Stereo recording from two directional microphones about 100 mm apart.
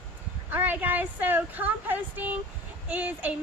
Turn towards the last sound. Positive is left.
turn(degrees=-15)  # may be behind; listen again after turning